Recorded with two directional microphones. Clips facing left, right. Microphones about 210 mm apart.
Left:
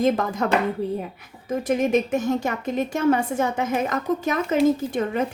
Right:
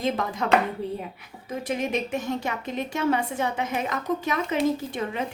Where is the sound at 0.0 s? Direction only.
45° left (ahead or behind).